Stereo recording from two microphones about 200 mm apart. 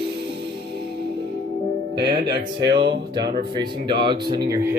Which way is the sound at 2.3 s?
25° right (ahead or behind).